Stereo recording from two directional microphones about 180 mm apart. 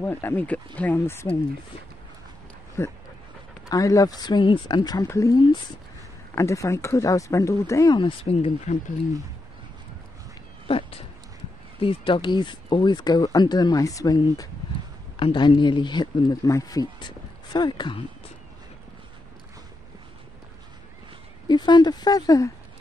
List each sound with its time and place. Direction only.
0.0 s speech: 10° left (ahead or behind)
2.8 s speech: 15° left (ahead or behind); by 8.7 s 35° left (ahead or behind)
10.7 s speech: 30° left (ahead or behind)
21.5 s speech: 25° left (ahead or behind)